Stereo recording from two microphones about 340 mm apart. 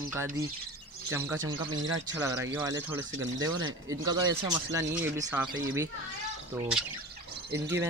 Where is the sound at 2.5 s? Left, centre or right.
Centre.